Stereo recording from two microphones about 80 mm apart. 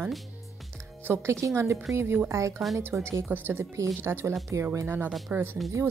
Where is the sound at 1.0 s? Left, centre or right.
Right.